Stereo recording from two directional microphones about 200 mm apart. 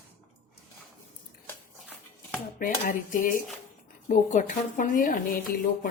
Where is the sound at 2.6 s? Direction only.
40° left (ahead or behind).